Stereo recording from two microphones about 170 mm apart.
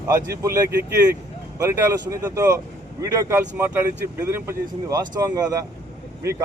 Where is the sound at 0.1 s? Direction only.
20° right (ahead or behind).